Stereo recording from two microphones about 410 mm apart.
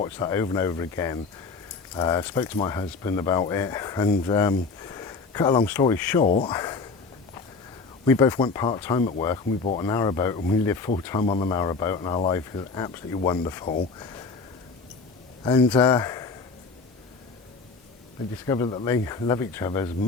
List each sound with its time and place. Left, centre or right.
0.0 s speech: centre
8.0 s speech: centre
15.4 s speech: centre
18.4 s speech: centre